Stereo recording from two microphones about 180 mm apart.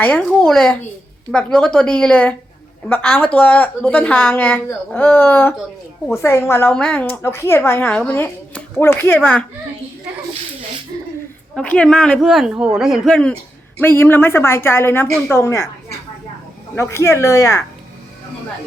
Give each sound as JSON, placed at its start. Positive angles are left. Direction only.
{"t": 0.0, "sound": "a woman's voice", "side_deg": 5}
{"t": 11.5, "sound": "a woman's voice", "side_deg": 5}
{"t": 16.7, "sound": "a woman's voice", "side_deg": 15}